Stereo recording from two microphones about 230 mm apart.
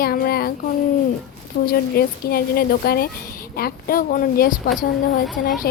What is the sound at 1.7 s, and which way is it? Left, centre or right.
Speech, left.